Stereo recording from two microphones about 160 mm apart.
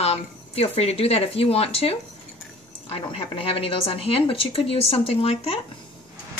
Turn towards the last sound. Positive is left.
turn(degrees=40)  # may be behind; listen again after turning